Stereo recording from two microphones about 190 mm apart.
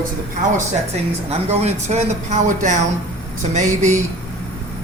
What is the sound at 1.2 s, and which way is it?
Speech, 35° right (ahead or behind).